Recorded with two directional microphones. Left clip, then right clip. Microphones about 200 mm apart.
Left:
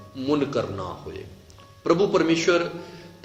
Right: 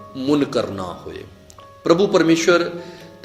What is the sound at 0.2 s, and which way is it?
A man's voice, 40° right (ahead or behind).